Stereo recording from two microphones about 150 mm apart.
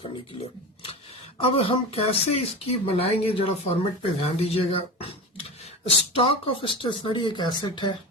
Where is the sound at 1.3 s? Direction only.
35° left (ahead or behind).